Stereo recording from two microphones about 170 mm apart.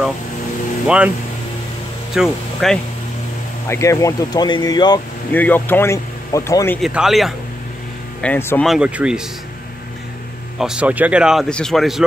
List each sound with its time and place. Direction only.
0.8 s speech: 5° right (ahead or behind)
2.1 s speech: centre (ahead or behind)
3.6 s speech: 15° left (ahead or behind)
5.3 s speech: 10° left (ahead or behind)
6.8 s speech: centre (ahead or behind)
8.2 s speech: 10° left (ahead or behind)
8.6 s speech: 5° right (ahead or behind)
10.6 s speech: 5° right (ahead or behind)